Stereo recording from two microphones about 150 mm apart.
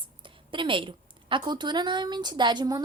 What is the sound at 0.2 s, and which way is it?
A woman's voice, 35° right (ahead or behind).